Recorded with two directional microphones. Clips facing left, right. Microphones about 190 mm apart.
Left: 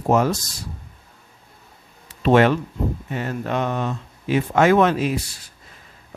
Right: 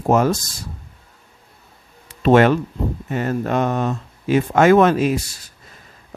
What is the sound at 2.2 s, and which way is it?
Speech, 45° right (ahead or behind).